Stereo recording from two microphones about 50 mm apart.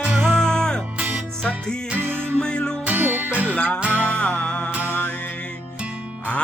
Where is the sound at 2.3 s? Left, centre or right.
Left.